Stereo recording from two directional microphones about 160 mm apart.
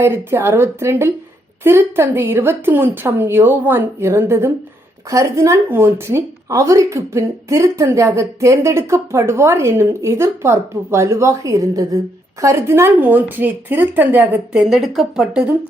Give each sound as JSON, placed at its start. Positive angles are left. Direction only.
{"t": 0.0, "sound": "a woman's voice", "side_deg": -15}